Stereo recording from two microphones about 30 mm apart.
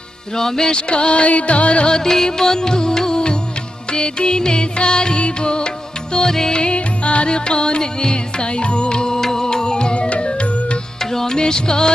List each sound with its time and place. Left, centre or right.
0.3 s music: centre
0.7 s music: left
2.0 s music: centre; by 5.7 s left
6.1 s music: centre
6.5 s music: left
7.3 s music: left
11.0 s music: centre